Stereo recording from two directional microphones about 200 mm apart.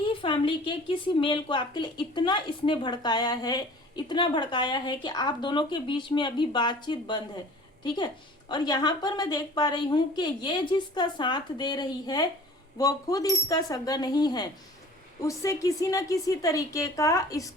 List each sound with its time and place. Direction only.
0.0 s a woman's voice: 25° left (ahead or behind)